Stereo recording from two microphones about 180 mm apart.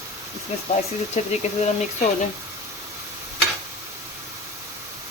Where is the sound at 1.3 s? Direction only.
40° left (ahead or behind).